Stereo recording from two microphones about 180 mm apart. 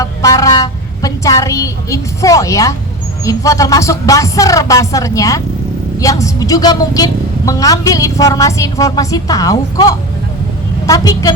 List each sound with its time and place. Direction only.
0.0 s vehicle: 20° left (ahead or behind)
3.2 s a woman's voice: 20° left (ahead or behind)